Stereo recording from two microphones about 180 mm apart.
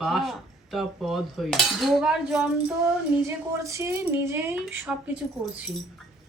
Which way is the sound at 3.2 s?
15° right (ahead or behind).